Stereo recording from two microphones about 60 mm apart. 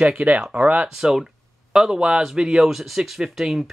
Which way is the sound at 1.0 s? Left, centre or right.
Centre.